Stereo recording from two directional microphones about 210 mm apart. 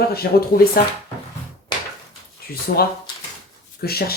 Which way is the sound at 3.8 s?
45° left (ahead or behind).